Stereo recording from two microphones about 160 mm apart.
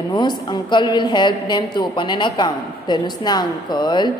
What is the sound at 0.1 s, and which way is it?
A woman's voice, 30° left (ahead or behind).